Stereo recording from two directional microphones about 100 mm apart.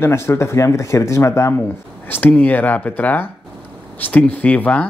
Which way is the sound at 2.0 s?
20° left (ahead or behind).